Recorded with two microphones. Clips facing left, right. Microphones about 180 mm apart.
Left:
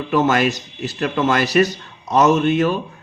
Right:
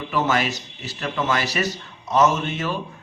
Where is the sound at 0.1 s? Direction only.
50° left (ahead or behind).